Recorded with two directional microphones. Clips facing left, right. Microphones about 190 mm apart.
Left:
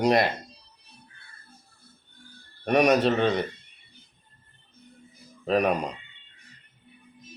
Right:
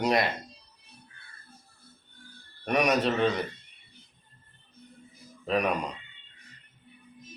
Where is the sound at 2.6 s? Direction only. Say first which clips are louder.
Left 5 dB; 35° left (ahead or behind).